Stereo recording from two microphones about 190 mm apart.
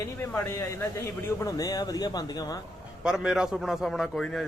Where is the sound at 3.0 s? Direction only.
5° right (ahead or behind).